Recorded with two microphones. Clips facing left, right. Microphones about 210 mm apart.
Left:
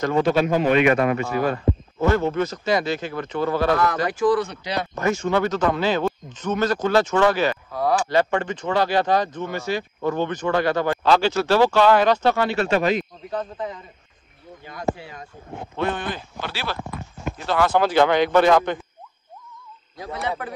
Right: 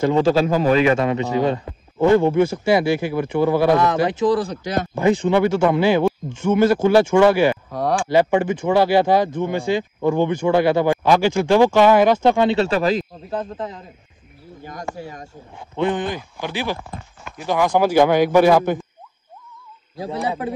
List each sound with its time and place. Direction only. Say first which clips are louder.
0.1 s a man's voice: right 3 dB; 30° right (ahead or behind)
1.0 s speech: right 2 dB; 20° right (ahead or behind)
12.6 s a man's voice: right 1 dB; 35° right (ahead or behind)
14.6 s speech: left 3 dB; 45° right (ahead or behind)
15.7 s speech: right 5 dB; 15° right (ahead or behind)
20.0 s speech: right 4 dB; 30° right (ahead or behind)